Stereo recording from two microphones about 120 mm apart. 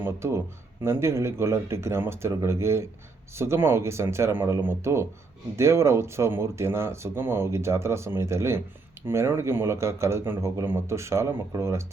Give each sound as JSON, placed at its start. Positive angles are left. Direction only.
{"t": 0.0, "sound": "speech", "side_deg": -20}